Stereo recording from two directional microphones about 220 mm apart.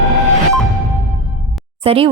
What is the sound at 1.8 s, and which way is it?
Speech, 25° right (ahead or behind).